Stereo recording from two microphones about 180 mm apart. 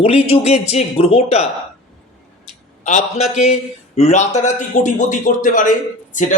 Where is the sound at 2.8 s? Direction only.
40° left (ahead or behind).